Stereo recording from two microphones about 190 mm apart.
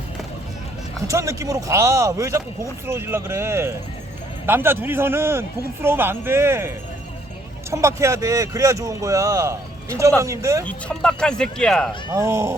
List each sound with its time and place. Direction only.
1.1 s speech: 15° right (ahead or behind)
10.7 s speech: 5° left (ahead or behind)
12.1 s speech: 15° right (ahead or behind)